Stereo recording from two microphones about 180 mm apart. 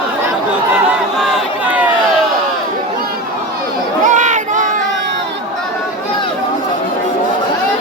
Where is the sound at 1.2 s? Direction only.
5° right (ahead or behind).